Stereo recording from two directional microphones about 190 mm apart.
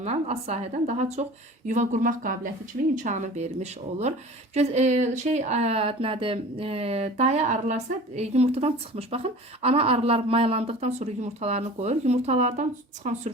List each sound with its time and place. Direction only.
0.0 s speech: 35° right (ahead or behind)